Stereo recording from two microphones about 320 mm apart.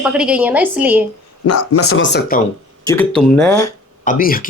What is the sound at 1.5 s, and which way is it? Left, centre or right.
Speech, left.